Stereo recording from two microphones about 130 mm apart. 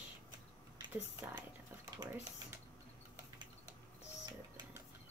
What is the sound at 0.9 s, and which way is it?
Speech, 15° right (ahead or behind).